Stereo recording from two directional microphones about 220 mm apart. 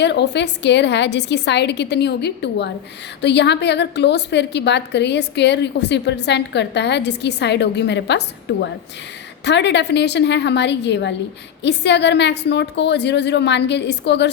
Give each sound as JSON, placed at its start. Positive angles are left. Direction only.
{"t": 0.0, "sound": "a woman's voice", "side_deg": 50}
{"t": 9.4, "sound": "a woman's voice", "side_deg": 50}